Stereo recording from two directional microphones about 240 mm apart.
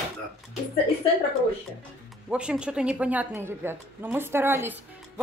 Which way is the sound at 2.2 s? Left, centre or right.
Centre.